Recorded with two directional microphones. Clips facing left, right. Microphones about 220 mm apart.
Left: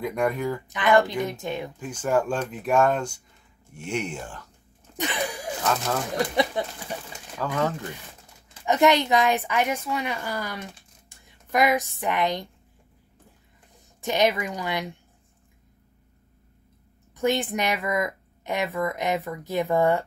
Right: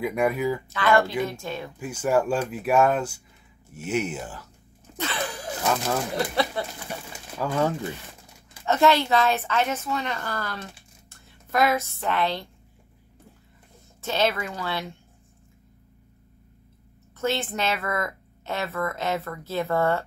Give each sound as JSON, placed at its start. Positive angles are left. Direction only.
{"t": 0.0, "sound": "speech", "side_deg": -5}
{"t": 0.7, "sound": "speech", "side_deg": 20}
{"t": 1.8, "sound": "speech", "side_deg": -10}
{"t": 4.9, "sound": "a sound", "side_deg": 15}
{"t": 5.6, "sound": "speech", "side_deg": -10}
{"t": 6.6, "sound": "a sound", "side_deg": 15}
{"t": 7.4, "sound": "speech", "side_deg": -10}
{"t": 8.6, "sound": "speech", "side_deg": 15}
{"t": 14.0, "sound": "speech", "side_deg": 15}
{"t": 17.1, "sound": "speech", "side_deg": 15}